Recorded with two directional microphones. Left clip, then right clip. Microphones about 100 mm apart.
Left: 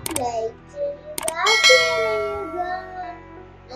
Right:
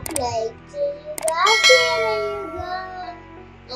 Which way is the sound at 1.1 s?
Centre (ahead or behind).